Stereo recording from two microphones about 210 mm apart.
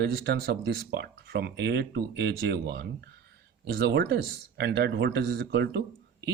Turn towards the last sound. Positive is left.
turn(degrees=-50)  # may be behind; listen again after turning